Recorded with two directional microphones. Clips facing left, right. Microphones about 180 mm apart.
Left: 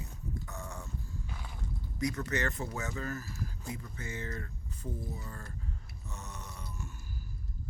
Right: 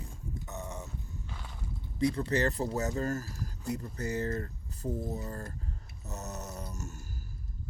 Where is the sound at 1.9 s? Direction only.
30° right (ahead or behind).